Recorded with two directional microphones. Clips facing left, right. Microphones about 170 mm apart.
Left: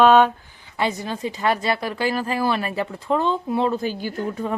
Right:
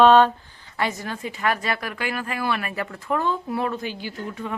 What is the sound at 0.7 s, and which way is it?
A woman's voice, 20° left (ahead or behind).